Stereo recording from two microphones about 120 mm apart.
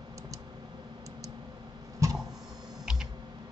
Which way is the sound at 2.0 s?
25° right (ahead or behind).